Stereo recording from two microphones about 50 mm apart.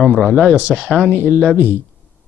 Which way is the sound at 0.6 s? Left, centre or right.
Right.